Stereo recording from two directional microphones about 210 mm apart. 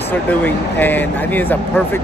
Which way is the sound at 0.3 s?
10° left (ahead or behind).